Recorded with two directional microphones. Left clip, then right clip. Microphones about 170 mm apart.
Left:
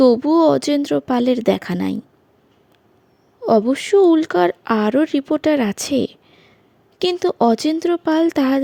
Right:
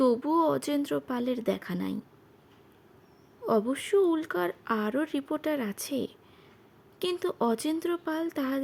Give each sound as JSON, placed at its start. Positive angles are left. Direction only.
{"t": 0.0, "sound": "speech", "side_deg": 30}
{"t": 3.4, "sound": "speech", "side_deg": 30}